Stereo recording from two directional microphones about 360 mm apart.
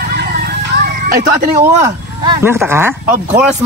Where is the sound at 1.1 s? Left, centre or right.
Right.